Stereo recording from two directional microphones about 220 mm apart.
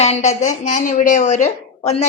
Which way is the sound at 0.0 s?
30° left (ahead or behind).